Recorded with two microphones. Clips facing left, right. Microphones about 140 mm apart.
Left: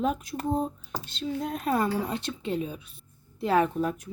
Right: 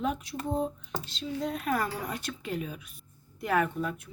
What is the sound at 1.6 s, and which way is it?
Speech, 25° left (ahead or behind).